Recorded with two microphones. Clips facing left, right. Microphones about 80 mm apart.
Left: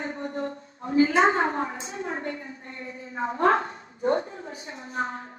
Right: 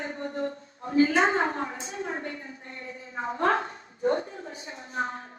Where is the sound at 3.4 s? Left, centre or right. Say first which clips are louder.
Left 3 dB; left.